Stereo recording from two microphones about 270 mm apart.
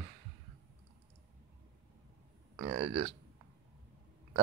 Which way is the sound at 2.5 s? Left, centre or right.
Centre.